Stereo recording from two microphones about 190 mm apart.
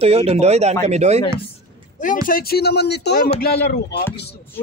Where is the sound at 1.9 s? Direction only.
45° left (ahead or behind); by 3.8 s 60° left (ahead or behind).